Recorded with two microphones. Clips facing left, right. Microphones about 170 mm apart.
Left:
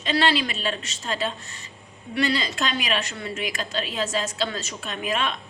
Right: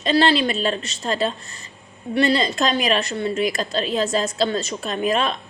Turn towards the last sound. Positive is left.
turn(degrees=-35)  # may be behind; listen again after turning